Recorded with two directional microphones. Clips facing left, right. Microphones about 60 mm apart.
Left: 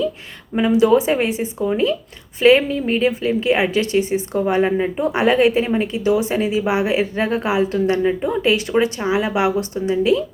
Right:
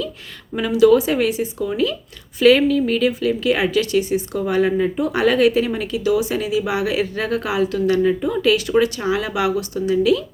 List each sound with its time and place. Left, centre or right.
0.5 s a woman's voice: left